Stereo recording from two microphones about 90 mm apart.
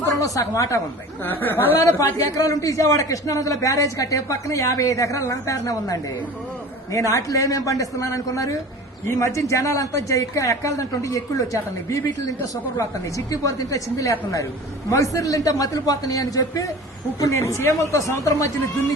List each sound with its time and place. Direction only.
0.1 s speech: 40° left (ahead or behind)
1.2 s a man's voice: 25° left (ahead or behind); by 18.9 s 40° left (ahead or behind)